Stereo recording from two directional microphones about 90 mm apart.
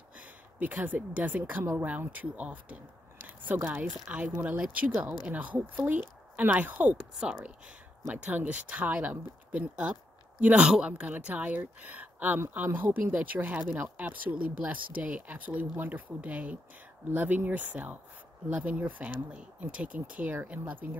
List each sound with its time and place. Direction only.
0.2 s speech: 15° right (ahead or behind)